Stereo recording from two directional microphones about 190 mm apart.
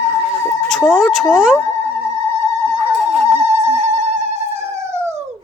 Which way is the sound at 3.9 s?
35° right (ahead or behind).